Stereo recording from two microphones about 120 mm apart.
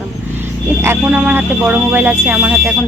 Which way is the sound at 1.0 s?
10° right (ahead or behind).